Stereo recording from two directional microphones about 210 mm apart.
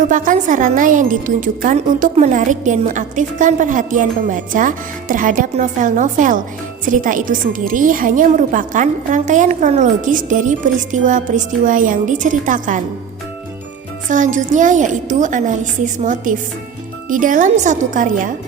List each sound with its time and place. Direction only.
0.1 s a woman's voice: 40° right (ahead or behind)
14.1 s a woman's voice: 35° right (ahead or behind)